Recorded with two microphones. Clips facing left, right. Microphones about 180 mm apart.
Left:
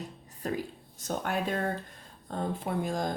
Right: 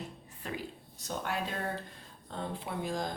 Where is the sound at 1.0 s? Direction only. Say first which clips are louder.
Left 5 dB; 50° left (ahead or behind).